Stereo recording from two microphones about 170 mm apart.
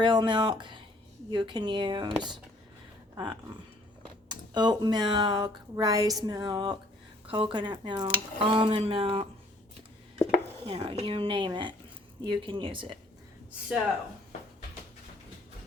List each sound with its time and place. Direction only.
0.0 s speech: 30° right (ahead or behind)
4.0 s speech: 25° right (ahead or behind)
10.7 s speech: 30° right (ahead or behind)